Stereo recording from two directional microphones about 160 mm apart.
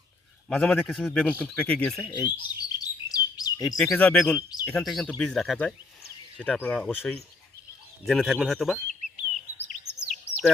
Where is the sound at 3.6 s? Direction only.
Centre (ahead or behind).